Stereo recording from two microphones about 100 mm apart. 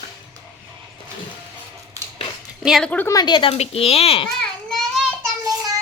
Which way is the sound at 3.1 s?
45° left (ahead or behind).